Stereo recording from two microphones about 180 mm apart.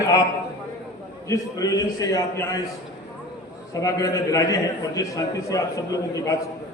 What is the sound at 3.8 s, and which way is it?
A man's voice, 20° left (ahead or behind).